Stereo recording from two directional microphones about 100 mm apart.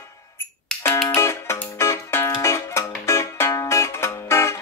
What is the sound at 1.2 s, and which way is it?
Music, 25° left (ahead or behind).